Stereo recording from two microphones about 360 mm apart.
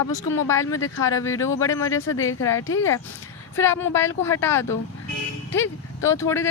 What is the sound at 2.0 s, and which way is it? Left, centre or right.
Speech, left.